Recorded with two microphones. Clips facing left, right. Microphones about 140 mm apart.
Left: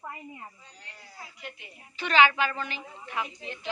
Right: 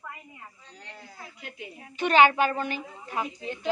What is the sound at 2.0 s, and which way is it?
A woman's voice, 50° right (ahead or behind).